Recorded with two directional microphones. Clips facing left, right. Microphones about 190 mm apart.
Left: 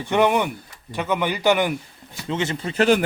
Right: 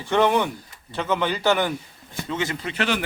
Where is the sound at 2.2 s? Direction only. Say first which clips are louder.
Left 3 dB; 25° left (ahead or behind).